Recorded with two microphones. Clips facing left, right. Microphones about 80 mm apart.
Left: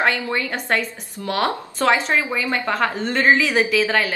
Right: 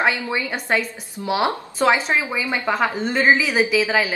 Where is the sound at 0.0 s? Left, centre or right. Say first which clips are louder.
Even; centre.